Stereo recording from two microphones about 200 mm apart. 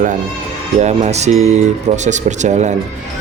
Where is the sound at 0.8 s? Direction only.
35° right (ahead or behind).